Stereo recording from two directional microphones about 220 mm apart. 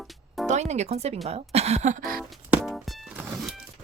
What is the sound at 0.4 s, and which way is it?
Speech, 30° right (ahead or behind).